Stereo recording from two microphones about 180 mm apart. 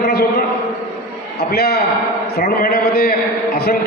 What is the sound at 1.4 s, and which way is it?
A man's voice, 60° left (ahead or behind).